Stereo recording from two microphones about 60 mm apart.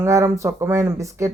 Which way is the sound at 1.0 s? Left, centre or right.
Right.